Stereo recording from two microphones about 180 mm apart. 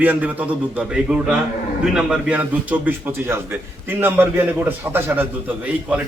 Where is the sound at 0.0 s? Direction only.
10° right (ahead or behind).